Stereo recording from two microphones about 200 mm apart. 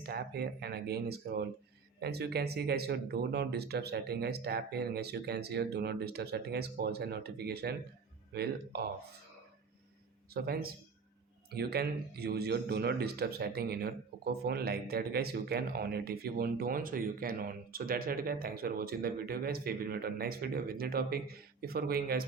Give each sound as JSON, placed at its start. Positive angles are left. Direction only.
{"t": 0.0, "sound": "speech", "side_deg": -50}
{"t": 10.3, "sound": "speech", "side_deg": -50}